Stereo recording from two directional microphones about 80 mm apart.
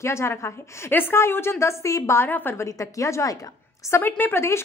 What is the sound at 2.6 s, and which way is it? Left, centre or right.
Speech, left.